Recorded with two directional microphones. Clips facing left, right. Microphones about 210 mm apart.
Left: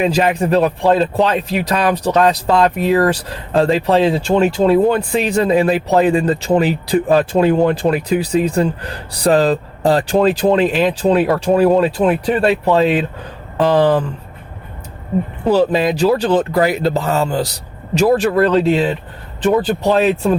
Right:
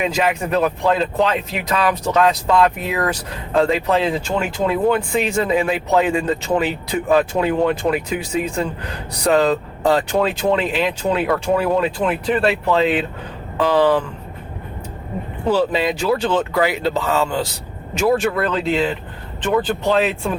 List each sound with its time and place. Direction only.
0.0 s speech: 35° left (ahead or behind)
11.5 s speech: 25° left (ahead or behind)
11.8 s speech: 40° left (ahead or behind)
15.4 s speech: 40° left (ahead or behind)